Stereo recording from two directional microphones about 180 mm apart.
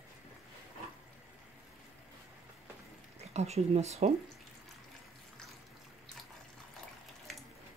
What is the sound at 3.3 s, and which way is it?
Speech, 35° right (ahead or behind).